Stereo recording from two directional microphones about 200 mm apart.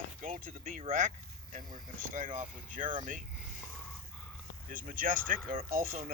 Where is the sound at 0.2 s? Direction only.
45° right (ahead or behind).